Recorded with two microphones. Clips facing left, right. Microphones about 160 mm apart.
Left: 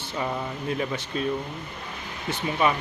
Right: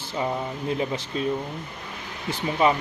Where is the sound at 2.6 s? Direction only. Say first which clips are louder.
Right 3 dB; 25° right (ahead or behind).